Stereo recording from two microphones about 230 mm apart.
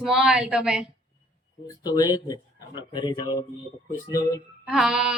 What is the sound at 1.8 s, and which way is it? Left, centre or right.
Speech, centre.